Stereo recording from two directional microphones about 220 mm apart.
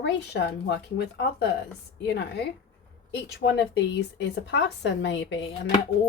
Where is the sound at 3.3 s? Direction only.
50° left (ahead or behind).